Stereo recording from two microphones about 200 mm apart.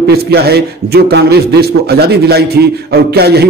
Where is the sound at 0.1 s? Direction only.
55° right (ahead or behind).